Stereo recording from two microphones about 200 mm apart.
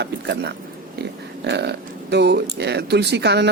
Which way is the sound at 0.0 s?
55° right (ahead or behind).